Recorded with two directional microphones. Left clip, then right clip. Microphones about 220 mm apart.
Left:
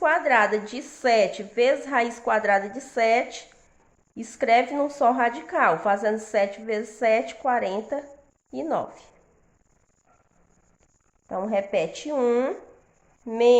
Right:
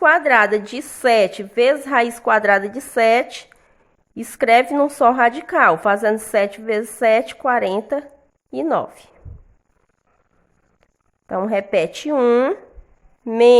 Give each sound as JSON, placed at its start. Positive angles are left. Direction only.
{"t": 0.0, "sound": "a woman's voice", "side_deg": -35}
{"t": 11.3, "sound": "a woman's voice", "side_deg": -40}